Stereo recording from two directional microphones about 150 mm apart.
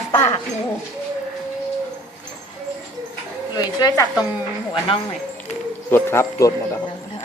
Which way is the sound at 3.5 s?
25° left (ahead or behind).